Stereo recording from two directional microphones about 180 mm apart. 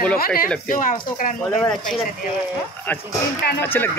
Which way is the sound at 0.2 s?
55° left (ahead or behind).